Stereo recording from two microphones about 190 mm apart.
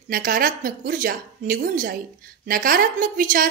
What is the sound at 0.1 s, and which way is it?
A woman's voice, 45° right (ahead or behind).